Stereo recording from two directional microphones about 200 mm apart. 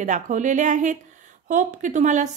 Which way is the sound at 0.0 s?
40° right (ahead or behind).